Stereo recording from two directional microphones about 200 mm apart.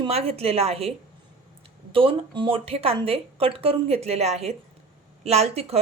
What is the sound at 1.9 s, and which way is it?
A woman's voice, 25° right (ahead or behind).